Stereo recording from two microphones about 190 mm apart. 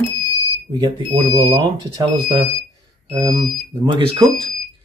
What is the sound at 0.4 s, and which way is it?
Speech, 25° right (ahead or behind).